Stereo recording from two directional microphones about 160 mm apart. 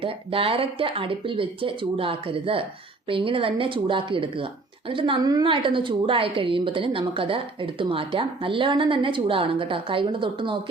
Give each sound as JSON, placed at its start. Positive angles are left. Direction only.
{"t": 0.0, "sound": "a woman's voice", "side_deg": -35}